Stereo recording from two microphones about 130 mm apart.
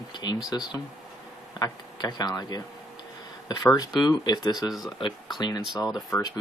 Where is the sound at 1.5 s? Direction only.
30° left (ahead or behind).